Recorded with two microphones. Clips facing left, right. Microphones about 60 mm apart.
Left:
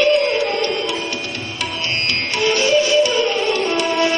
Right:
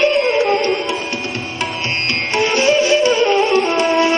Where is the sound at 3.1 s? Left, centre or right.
Right.